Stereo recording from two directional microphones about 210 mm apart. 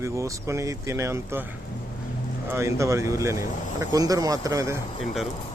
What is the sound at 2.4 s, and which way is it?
Speech, 15° right (ahead or behind).